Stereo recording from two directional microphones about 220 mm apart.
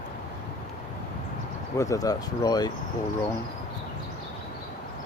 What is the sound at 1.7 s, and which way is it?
Speech, 15° left (ahead or behind).